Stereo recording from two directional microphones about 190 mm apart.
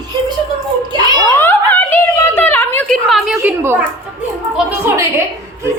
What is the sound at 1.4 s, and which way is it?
A woman's voice, 10° left (ahead or behind).